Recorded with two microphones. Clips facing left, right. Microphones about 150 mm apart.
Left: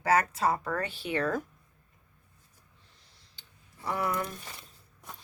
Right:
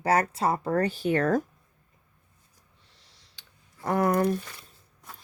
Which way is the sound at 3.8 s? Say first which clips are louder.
Right 8 dB; 50° right (ahead or behind).